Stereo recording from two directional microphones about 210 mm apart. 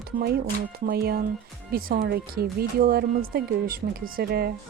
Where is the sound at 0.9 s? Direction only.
50° right (ahead or behind).